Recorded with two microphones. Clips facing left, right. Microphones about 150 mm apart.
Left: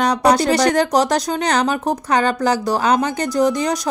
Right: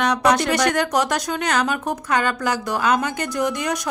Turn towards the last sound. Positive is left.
turn(degrees=35)  # may be behind; listen again after turning